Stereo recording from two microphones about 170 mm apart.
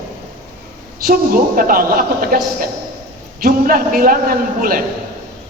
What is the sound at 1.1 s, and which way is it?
A man's voice, 55° right (ahead or behind).